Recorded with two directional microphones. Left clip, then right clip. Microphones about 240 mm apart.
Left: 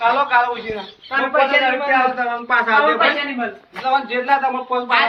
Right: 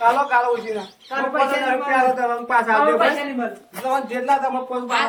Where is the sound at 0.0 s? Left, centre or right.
Centre.